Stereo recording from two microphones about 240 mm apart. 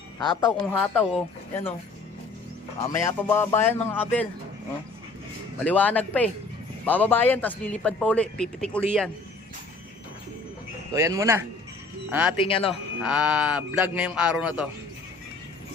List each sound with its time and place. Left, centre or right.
0.2 s speech: centre
0.5 s a man's voice: centre
2.8 s speech: centre
5.6 s a man's voice: centre
10.9 s speech: centre
12.4 s speech: left
13.0 s a man's voice: centre